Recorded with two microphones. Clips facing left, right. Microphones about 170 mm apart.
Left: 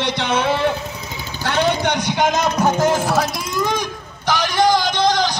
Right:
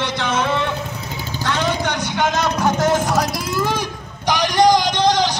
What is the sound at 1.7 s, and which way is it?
Vehicle, 40° right (ahead or behind).